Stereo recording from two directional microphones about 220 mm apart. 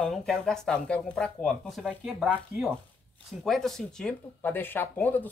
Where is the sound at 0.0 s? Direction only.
Centre (ahead or behind).